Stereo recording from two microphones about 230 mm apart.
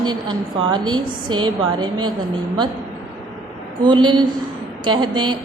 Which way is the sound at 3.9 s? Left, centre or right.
Centre.